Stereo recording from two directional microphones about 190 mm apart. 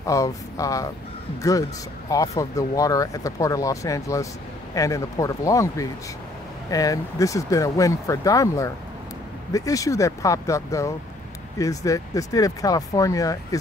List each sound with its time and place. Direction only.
0.0 s speech: 15° left (ahead or behind)
2.0 s speech: 15° left (ahead or behind)